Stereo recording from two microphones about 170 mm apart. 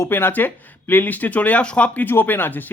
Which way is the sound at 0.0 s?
10° left (ahead or behind).